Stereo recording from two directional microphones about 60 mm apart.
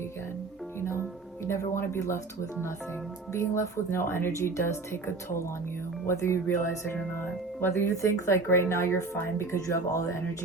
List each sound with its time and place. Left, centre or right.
0.8 s music: left
1.5 s speech: left